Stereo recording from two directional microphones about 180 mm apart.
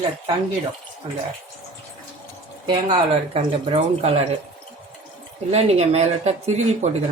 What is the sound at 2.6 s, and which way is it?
Speech, 30° right (ahead or behind).